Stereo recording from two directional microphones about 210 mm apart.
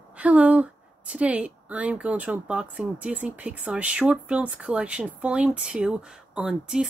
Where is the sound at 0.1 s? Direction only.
5° right (ahead or behind).